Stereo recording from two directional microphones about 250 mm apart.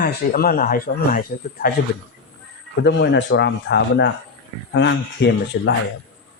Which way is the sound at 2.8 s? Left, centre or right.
Left.